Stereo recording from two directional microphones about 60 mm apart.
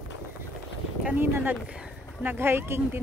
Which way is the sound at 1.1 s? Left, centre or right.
Right.